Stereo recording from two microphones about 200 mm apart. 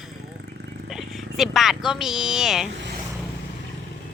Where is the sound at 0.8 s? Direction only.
Centre (ahead or behind).